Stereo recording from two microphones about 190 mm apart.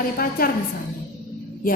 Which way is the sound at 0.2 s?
50° left (ahead or behind).